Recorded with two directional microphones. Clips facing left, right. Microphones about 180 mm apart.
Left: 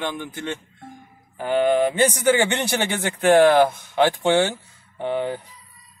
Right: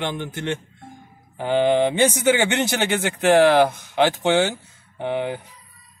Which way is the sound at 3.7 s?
20° right (ahead or behind).